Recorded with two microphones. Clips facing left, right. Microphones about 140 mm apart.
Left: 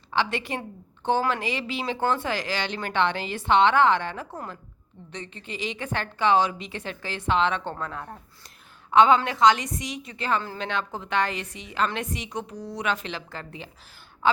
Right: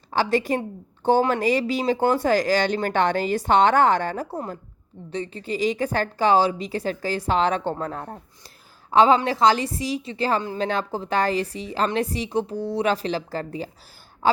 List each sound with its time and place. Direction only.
0.1 s a woman's voice: 40° right (ahead or behind)